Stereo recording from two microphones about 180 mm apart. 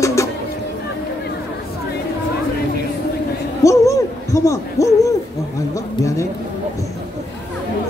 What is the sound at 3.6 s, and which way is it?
Hoot, 15° left (ahead or behind).